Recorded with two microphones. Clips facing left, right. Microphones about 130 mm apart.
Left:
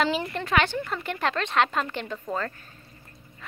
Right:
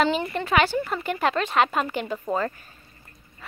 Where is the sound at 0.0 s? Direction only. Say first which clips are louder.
Right 3 dB; centre (ahead or behind).